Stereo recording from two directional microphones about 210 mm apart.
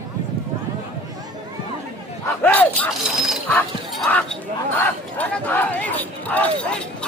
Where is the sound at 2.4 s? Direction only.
5° left (ahead or behind).